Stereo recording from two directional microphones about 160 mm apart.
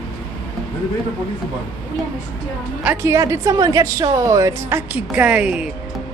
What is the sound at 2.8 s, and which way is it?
A woman's voice, 15° right (ahead or behind).